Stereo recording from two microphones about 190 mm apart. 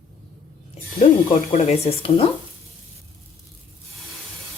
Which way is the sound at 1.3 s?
35° left (ahead or behind).